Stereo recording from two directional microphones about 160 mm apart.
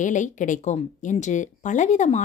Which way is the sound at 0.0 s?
50° left (ahead or behind).